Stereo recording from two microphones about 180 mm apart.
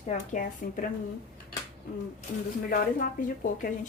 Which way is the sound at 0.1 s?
50° left (ahead or behind).